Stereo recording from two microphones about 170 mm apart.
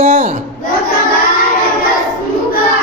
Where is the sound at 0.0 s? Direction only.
50° right (ahead or behind).